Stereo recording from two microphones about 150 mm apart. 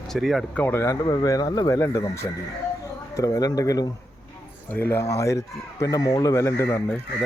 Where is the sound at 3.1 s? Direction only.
25° left (ahead or behind).